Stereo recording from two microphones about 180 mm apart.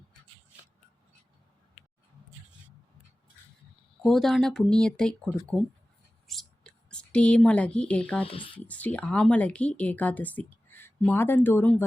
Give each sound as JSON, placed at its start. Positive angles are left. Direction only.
{"t": 4.0, "sound": "speech", "side_deg": 0}
{"t": 6.2, "sound": "a sound", "side_deg": 5}
{"t": 8.2, "sound": "speech", "side_deg": 30}
{"t": 8.5, "sound": "speech", "side_deg": 10}